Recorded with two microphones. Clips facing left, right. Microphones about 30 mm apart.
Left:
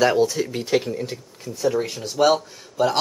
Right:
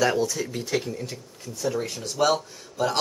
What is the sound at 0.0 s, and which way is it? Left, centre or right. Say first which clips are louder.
Speech: left 5 dB; left.